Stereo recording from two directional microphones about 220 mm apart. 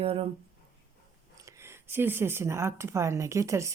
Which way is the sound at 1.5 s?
10° right (ahead or behind).